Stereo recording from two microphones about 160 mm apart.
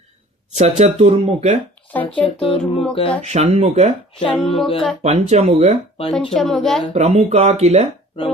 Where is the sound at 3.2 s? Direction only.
45° right (ahead or behind).